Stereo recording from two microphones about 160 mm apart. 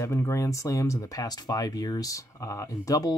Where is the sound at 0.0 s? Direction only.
15° left (ahead or behind).